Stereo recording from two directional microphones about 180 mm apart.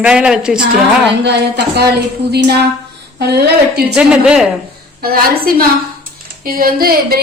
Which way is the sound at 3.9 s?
5° right (ahead or behind).